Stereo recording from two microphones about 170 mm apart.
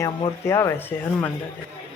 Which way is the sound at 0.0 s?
15° left (ahead or behind).